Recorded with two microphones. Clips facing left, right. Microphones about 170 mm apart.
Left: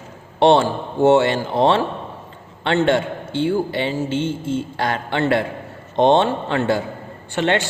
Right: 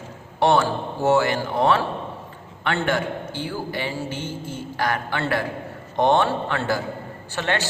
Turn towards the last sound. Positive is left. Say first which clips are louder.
# left 6 dB
turn(degrees=20)  # may be behind; listen again after turning